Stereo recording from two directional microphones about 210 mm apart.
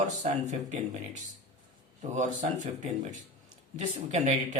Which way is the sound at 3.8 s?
35° right (ahead or behind).